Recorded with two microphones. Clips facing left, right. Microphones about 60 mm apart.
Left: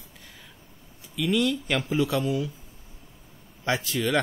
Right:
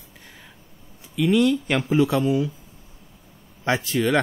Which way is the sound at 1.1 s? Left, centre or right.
Right.